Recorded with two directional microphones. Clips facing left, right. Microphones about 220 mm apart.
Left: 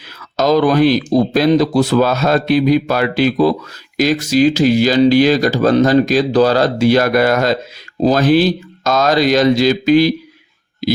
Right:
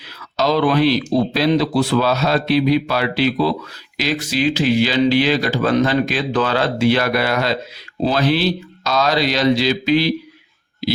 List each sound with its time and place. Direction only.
0.3 s speech: 45° left (ahead or behind)